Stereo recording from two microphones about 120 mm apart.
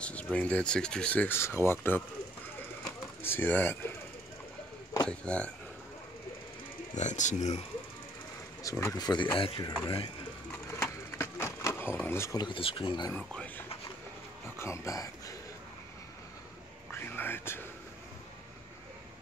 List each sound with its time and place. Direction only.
0.0 s speech: 10° left (ahead or behind)
3.2 s speech: 20° left (ahead or behind)
5.0 s speech: 10° left (ahead or behind)
7.0 s speech: 90° left; by 7.6 s 75° left (ahead or behind)
8.6 s speech: 25° left (ahead or behind)
9.8 s speech: 50° left (ahead or behind)
10.5 s a sound: 20° left (ahead or behind)
12.4 s speech: 45° left (ahead or behind)
13.1 s speech: 10° left (ahead or behind)
14.6 s speech: 25° left (ahead or behind)
16.9 s whispering: 20° left (ahead or behind)